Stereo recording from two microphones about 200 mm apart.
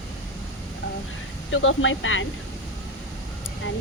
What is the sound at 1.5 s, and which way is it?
Speech, 75° left (ahead or behind).